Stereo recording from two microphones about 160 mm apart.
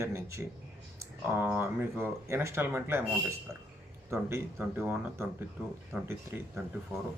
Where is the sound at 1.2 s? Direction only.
10° right (ahead or behind).